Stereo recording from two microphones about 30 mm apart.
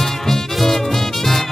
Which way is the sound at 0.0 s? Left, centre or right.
Centre.